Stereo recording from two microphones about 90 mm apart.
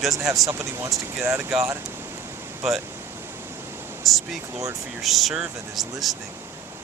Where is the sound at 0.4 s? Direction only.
30° right (ahead or behind).